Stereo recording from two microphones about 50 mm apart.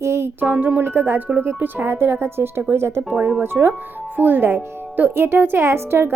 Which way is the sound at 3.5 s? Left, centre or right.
Right.